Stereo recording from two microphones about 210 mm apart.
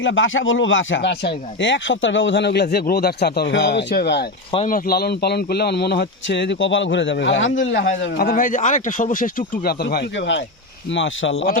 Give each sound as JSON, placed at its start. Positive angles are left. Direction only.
{"t": 0.0, "sound": "speech", "side_deg": 65}